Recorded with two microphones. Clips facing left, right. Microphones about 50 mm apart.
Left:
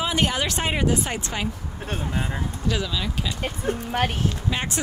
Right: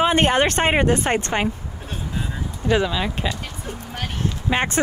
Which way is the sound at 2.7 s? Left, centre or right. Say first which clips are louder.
Right 7 dB; right.